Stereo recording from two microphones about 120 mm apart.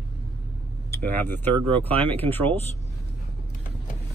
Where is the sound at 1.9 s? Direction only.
50° right (ahead or behind).